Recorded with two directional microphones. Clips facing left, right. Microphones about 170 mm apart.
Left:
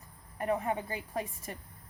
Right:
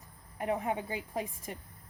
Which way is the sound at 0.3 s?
15° right (ahead or behind).